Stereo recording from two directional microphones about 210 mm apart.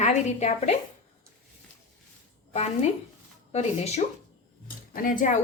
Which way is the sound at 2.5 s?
30° left (ahead or behind).